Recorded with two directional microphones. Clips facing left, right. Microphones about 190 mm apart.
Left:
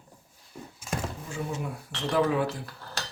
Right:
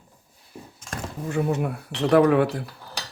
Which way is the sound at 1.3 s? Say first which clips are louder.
Right 11 dB; 65° right (ahead or behind).